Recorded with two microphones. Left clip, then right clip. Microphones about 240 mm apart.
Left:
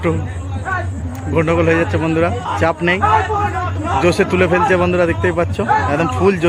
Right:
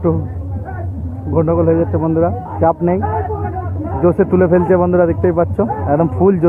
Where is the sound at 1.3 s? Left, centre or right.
Centre.